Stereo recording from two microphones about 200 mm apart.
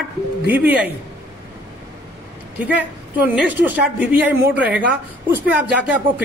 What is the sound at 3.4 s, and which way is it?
A woman's voice, 10° right (ahead or behind).